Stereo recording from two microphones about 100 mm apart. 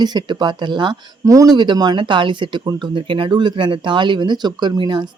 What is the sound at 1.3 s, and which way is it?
Speech, 35° right (ahead or behind).